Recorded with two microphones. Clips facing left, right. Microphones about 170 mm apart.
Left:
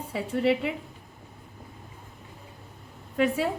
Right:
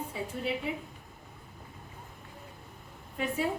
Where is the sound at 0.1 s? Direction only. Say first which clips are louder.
Left 13 dB; 75° left (ahead or behind).